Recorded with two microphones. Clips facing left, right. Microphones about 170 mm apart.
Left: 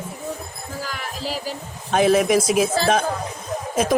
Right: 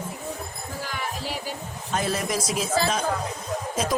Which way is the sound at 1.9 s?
75° left (ahead or behind).